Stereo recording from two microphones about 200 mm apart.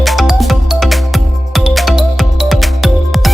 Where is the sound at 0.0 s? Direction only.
Centre (ahead or behind).